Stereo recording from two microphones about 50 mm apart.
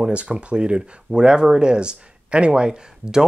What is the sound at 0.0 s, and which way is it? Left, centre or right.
Speech, right.